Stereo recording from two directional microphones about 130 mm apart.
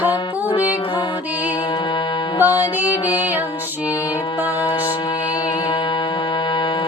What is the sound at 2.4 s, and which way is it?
Music, 15° right (ahead or behind).